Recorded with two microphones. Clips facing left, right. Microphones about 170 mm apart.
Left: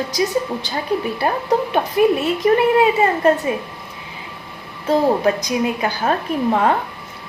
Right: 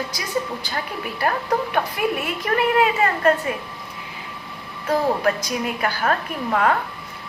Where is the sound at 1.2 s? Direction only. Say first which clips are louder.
Right 1 dB; 20° left (ahead or behind).